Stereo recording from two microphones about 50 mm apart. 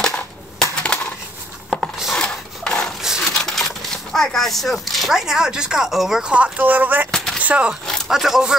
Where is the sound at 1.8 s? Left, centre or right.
Centre.